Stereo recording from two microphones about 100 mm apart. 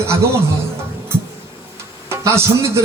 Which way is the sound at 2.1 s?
30° right (ahead or behind).